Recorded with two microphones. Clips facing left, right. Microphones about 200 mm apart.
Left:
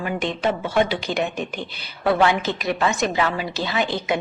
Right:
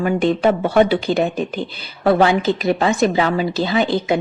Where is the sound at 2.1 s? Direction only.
30° right (ahead or behind).